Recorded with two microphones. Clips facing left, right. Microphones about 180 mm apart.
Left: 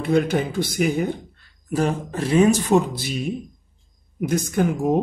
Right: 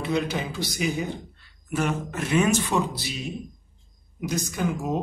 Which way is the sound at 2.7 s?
50° left (ahead or behind).